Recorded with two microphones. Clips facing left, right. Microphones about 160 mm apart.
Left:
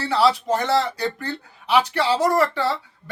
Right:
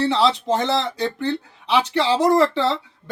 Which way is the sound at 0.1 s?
20° right (ahead or behind).